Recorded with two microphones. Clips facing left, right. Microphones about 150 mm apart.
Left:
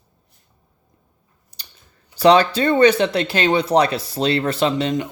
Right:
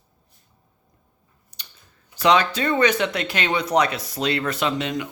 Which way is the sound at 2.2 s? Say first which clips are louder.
Left 5 dB; 35° left (ahead or behind).